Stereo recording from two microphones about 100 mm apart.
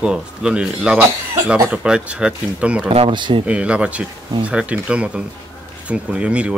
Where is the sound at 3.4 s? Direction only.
10° right (ahead or behind).